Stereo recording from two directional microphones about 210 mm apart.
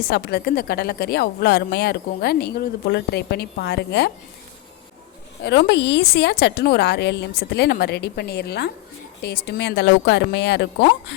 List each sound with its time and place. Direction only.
0.1 s speech: 50° left (ahead or behind)
5.4 s speech: 55° left (ahead or behind)